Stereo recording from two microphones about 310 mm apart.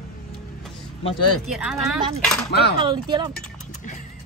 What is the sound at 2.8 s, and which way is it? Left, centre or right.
Speech, centre.